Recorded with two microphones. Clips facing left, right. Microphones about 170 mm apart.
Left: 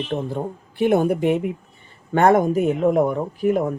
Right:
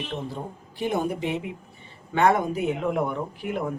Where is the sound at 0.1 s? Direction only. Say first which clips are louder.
Left 7 dB; 60° left (ahead or behind); by 3.6 s 40° left (ahead or behind).